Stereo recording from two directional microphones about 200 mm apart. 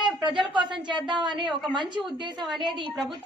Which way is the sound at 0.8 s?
25° right (ahead or behind).